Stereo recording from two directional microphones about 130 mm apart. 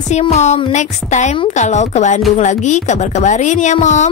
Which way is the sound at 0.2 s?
55° left (ahead or behind).